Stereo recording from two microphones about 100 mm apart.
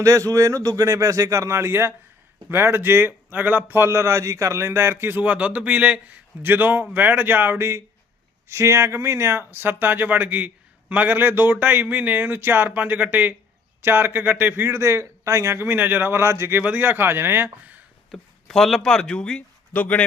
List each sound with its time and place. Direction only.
0.0 s speech: 35° right (ahead or behind); by 17.8 s 20° right (ahead or behind)
18.1 s speech: 5° left (ahead or behind)